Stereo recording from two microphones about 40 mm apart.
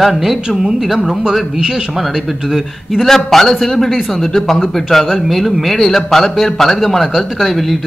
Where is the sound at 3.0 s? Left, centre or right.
Centre.